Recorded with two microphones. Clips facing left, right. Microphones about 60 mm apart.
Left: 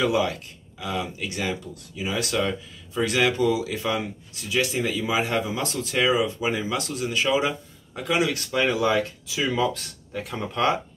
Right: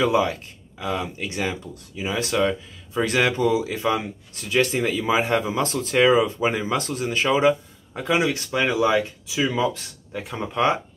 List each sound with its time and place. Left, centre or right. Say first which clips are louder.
0.0 s speech: right 3 dB; right
4.4 s speech: right 3 dB; right